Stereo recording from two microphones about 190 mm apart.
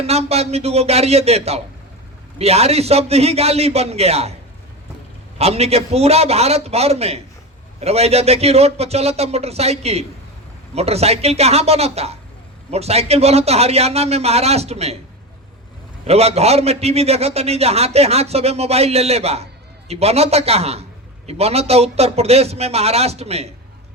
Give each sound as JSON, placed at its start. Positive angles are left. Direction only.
{"t": 0.0, "sound": "a man's voice", "side_deg": -35}
{"t": 5.4, "sound": "a man's voice", "side_deg": -35}
{"t": 16.0, "sound": "a man's voice", "side_deg": -35}